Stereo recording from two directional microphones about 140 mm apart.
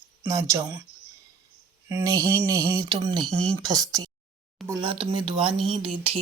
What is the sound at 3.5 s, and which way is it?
Speech, 25° right (ahead or behind).